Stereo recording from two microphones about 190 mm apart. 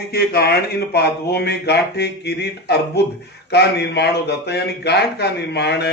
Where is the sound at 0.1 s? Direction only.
55° left (ahead or behind).